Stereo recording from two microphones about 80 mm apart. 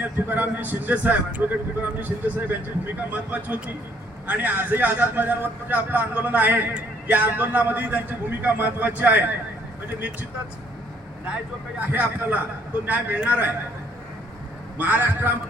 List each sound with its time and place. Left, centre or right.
0.0 s a man's voice: right
11.9 s a man's voice: right
14.8 s a man's voice: right